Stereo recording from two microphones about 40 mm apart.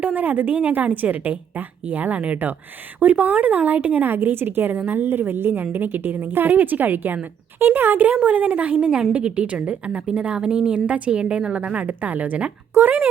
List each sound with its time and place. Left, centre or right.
0.0 s a woman's voice: right
8.8 s a woman's voice: right
10.8 s a woman's voice: right
12.8 s a woman's voice: right